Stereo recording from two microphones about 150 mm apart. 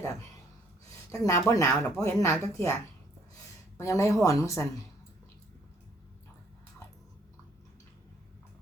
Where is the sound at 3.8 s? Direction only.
20° left (ahead or behind).